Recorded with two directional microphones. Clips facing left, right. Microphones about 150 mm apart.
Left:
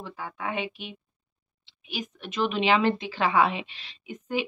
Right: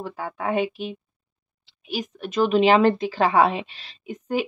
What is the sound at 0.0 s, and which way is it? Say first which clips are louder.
Speech: right 6 dB; 45° right (ahead or behind).